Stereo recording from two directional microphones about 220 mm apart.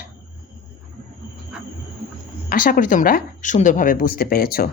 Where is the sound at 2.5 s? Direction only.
40° left (ahead or behind).